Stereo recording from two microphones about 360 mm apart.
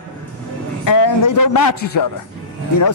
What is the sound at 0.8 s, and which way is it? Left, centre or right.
Speech, left.